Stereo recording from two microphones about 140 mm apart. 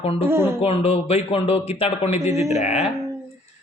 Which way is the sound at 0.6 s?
45° left (ahead or behind).